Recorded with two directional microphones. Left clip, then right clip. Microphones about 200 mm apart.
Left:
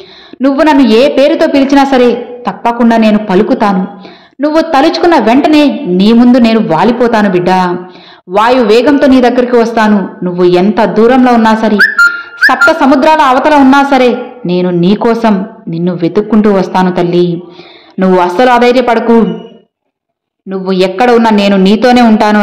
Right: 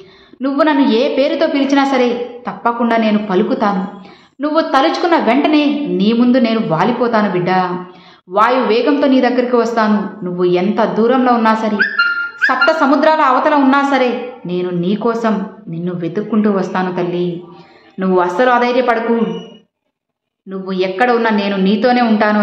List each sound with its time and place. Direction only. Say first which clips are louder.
0.4 s a woman's voice: left 7 dB; 35° left (ahead or behind)
20.4 s a woman's voice: left 8 dB; 35° left (ahead or behind)